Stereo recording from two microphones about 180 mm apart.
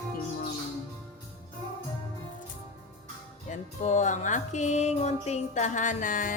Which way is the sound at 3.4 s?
40° left (ahead or behind).